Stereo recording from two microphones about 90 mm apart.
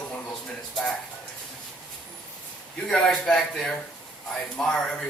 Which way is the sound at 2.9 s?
5° left (ahead or behind).